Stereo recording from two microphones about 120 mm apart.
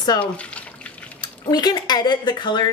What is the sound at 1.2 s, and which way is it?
A woman's voice, 35° left (ahead or behind).